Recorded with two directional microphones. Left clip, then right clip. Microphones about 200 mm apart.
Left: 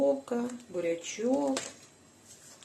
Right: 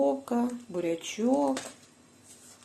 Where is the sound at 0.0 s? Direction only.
45° right (ahead or behind).